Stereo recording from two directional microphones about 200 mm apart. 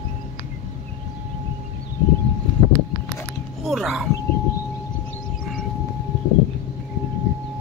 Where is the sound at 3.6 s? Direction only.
Centre (ahead or behind).